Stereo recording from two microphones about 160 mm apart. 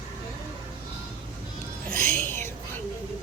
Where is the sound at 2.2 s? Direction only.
15° left (ahead or behind).